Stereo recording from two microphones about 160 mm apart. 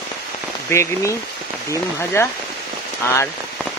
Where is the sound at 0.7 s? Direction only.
15° left (ahead or behind).